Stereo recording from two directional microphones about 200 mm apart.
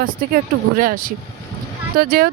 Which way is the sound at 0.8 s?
45° right (ahead or behind).